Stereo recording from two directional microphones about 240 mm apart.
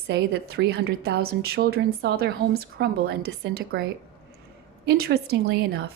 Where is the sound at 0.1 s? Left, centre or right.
Right.